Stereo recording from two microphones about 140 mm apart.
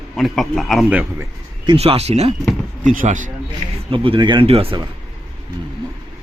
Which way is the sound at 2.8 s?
70° right (ahead or behind).